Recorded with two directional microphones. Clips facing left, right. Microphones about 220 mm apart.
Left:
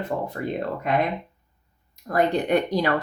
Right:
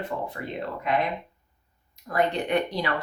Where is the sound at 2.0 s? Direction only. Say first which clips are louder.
Left 4 dB; 40° left (ahead or behind).